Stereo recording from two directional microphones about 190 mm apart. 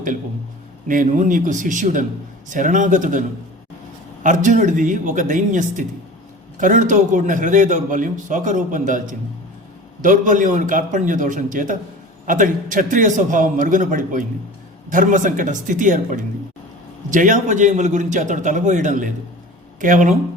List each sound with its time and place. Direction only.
0.9 s a man's voice: 45° right (ahead or behind)